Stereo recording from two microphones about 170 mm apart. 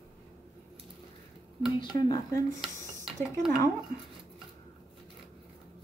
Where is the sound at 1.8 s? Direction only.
25° left (ahead or behind).